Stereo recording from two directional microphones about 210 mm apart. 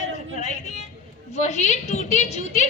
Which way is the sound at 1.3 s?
35° left (ahead or behind).